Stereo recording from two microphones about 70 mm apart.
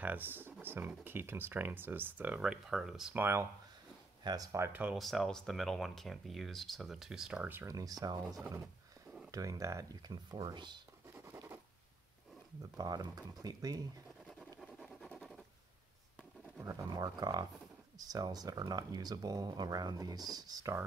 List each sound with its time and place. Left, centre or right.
0.0 s speech: right
2.3 s speech: centre
3.2 s speech: right
4.2 s speech: right
4.9 s speech: centre
7.6 s speech: right
10.1 s speech: right
12.7 s speech: right
14.6 s a sound: centre
15.1 s scratch: centre
16.6 s speech: right
16.9 s speech: right